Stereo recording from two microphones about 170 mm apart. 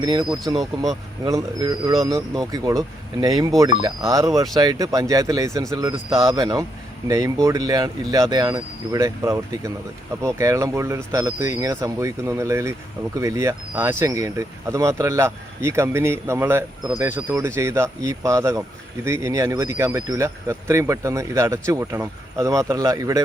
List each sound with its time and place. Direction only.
0.0 s speech: 25° right (ahead or behind)
3.8 s speech: 20° right (ahead or behind)